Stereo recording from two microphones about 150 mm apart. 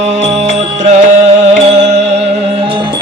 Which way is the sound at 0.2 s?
50° right (ahead or behind).